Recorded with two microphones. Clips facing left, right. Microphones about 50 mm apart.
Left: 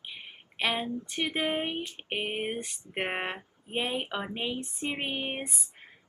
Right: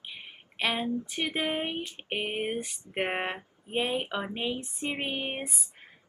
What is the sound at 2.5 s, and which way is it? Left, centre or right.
Speech, centre.